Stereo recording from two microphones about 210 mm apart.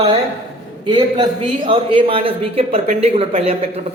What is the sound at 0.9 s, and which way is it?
Speech, 20° right (ahead or behind).